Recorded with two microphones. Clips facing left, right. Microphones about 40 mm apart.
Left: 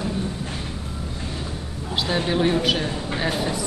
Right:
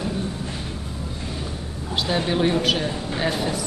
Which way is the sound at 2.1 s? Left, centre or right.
Centre.